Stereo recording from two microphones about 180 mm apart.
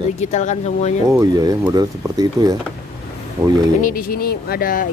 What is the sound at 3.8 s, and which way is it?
Speech, 55° left (ahead or behind).